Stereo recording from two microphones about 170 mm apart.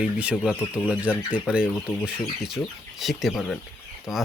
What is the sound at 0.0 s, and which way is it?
Speech, 5° right (ahead or behind).